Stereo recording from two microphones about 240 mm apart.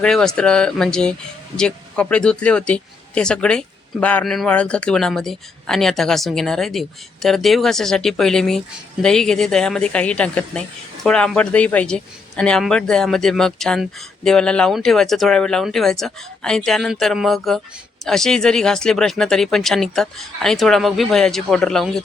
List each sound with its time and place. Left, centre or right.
0.0 s speech: centre